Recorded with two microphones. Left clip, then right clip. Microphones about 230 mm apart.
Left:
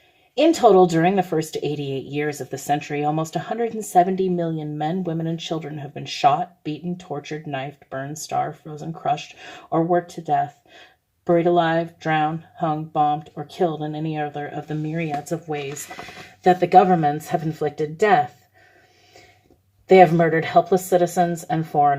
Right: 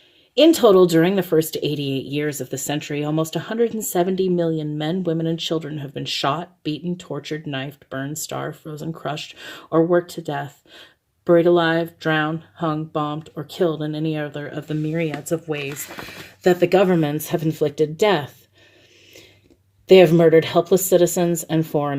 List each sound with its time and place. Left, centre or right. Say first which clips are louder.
0.3 s speech: right 1 dB; right
8.7 s speech: right 2 dB; right
9.6 s speech: right 3 dB; right
19.9 s speech: right 2 dB; right